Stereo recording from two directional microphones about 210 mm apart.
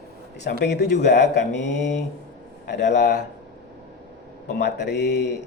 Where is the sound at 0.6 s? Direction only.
55° left (ahead or behind).